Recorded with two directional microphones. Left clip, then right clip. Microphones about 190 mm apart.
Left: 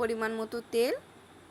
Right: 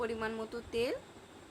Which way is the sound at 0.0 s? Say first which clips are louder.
Left 6 dB; 30° left (ahead or behind).